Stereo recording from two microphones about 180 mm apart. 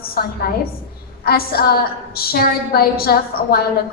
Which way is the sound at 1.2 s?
60° left (ahead or behind).